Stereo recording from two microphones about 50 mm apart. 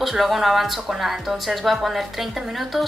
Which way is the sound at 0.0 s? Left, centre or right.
Centre.